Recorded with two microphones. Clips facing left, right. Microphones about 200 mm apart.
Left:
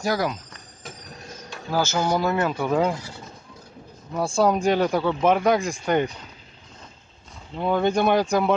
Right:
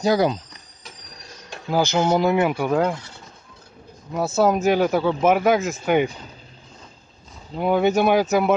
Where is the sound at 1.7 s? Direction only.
15° right (ahead or behind).